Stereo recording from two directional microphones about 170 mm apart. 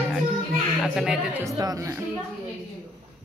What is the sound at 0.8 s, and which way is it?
Speech, centre (ahead or behind).